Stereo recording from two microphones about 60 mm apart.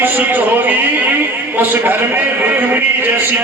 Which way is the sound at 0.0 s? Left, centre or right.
Right.